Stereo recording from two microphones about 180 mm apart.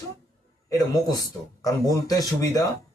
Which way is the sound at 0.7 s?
20° left (ahead or behind).